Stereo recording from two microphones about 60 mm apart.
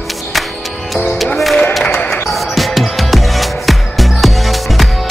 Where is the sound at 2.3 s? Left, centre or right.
Centre.